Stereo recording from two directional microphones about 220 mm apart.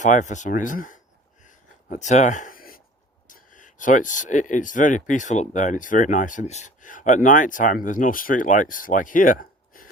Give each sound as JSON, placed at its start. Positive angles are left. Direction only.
{"t": 0.0, "sound": "speech", "side_deg": 35}
{"t": 1.5, "sound": "a sound", "side_deg": 35}
{"t": 3.2, "sound": "speech", "side_deg": 35}